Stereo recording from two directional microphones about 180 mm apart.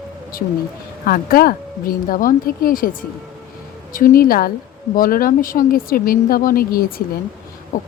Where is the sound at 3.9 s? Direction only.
50° left (ahead or behind).